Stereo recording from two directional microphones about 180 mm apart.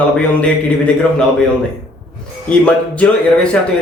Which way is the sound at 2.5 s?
5° left (ahead or behind).